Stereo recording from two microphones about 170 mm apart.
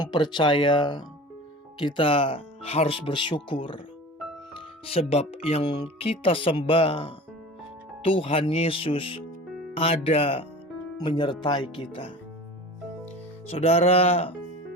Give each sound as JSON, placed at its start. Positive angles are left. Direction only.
{"t": 0.0, "sound": "speech", "side_deg": 25}
{"t": 13.5, "sound": "speech", "side_deg": 35}